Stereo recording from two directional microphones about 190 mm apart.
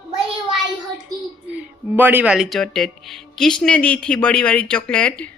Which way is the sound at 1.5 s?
10° right (ahead or behind).